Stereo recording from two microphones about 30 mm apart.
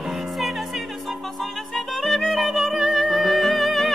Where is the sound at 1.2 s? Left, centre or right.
Centre.